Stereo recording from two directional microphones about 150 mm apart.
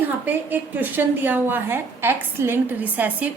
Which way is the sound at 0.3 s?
10° right (ahead or behind).